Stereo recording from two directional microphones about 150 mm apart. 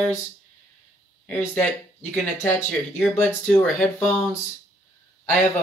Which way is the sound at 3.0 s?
10° left (ahead or behind).